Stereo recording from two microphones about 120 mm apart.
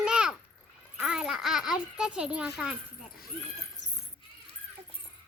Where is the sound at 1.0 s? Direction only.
5° right (ahead or behind).